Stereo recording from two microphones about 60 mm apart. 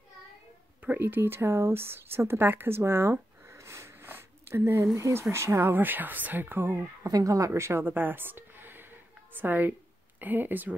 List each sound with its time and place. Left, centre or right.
0.8 s speech: right
4.0 s a sound: right
4.9 s speech: right
7.1 s speech: right
7.9 s a sound: right
9.4 s a woman's voice: right